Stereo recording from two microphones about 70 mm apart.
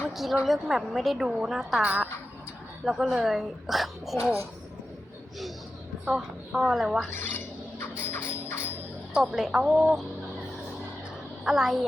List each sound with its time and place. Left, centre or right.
0.1 s a sound: centre
0.4 s a woman's voice: centre
1.8 s a woman's voice: right
2.8 s a woman's voice: centre
6.1 s a woman's voice: centre
7.1 s a sound: left
9.3 s a woman's voice: centre
11.4 s a woman's voice: centre